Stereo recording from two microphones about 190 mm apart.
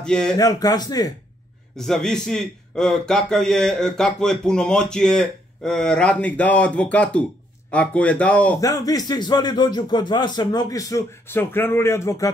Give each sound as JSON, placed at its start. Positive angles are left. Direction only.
{"t": 0.0, "sound": "a man's voice", "side_deg": 5}
{"t": 0.4, "sound": "speech", "side_deg": 20}
{"t": 1.8, "sound": "a man's voice", "side_deg": 5}
{"t": 8.5, "sound": "speech", "side_deg": 20}